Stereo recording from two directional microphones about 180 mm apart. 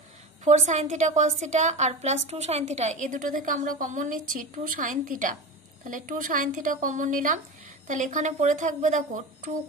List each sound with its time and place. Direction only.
0.4 s a woman's voice: 45° right (ahead or behind)